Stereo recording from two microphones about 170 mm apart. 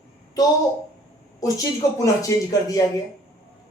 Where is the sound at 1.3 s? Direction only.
20° left (ahead or behind).